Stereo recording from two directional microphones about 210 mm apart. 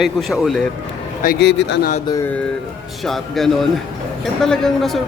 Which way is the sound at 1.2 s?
45° left (ahead or behind).